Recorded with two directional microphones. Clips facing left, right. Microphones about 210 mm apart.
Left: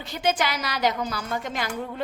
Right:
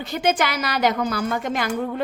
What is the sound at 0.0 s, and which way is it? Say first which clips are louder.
A woman's voice: right 4 dB; 50° right (ahead or behind).